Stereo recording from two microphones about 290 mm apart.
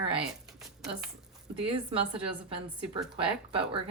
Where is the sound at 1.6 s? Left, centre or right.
Centre.